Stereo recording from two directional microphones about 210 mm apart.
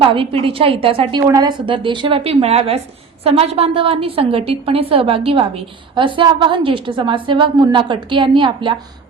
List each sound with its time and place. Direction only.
0.0 s a woman's voice: 25° right (ahead or behind)